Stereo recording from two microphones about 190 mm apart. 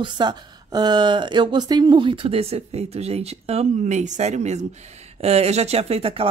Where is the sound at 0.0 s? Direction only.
25° right (ahead or behind).